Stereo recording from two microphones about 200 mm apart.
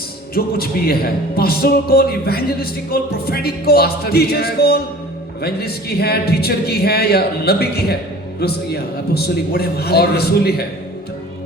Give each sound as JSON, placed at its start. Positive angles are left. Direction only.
{"t": 0.3, "sound": "a man's voice", "side_deg": 50}